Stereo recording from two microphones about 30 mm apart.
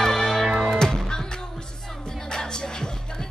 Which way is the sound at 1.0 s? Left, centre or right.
Left.